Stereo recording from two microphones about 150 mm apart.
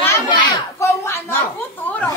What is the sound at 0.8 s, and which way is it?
Speech, 15° left (ahead or behind).